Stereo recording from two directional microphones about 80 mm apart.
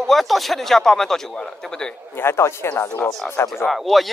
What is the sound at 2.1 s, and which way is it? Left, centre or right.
Speech, left.